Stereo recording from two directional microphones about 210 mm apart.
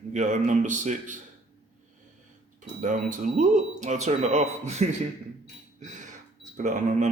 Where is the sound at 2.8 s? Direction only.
40° right (ahead or behind).